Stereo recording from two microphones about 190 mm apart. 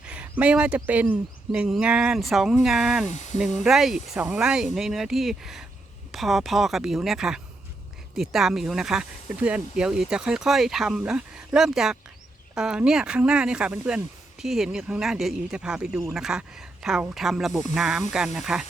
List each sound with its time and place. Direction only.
0.0 s speech: 5° right (ahead or behind)
3.1 s speech: 40° left (ahead or behind)
3.6 s speech: centre (ahead or behind)